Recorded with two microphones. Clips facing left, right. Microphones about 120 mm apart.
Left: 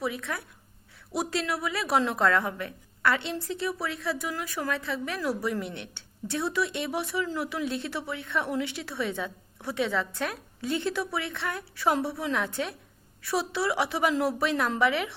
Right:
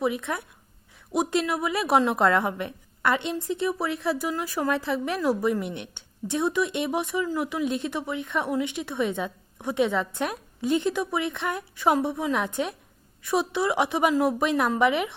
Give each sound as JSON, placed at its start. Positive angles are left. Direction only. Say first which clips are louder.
{"t": 0.0, "sound": "a woman's voice", "louder": "right 5 dB", "side_deg": -20}